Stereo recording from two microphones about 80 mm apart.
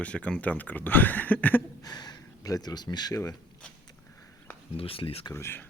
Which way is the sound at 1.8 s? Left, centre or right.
Left.